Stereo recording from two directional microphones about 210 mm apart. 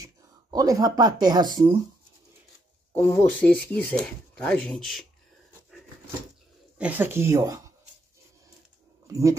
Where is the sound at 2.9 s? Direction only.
10° left (ahead or behind).